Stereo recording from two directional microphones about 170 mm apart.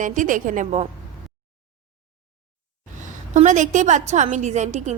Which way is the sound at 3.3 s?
45° right (ahead or behind).